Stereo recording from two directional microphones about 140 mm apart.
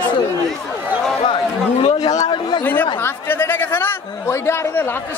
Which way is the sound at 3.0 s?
15° left (ahead or behind).